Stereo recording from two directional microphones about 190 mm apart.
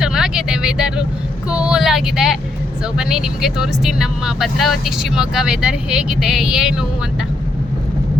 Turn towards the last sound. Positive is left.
turn(degrees=-5)  # may be behind; listen again after turning